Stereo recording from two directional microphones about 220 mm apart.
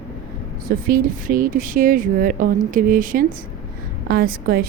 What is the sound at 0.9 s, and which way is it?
A woman's voice, 40° right (ahead or behind).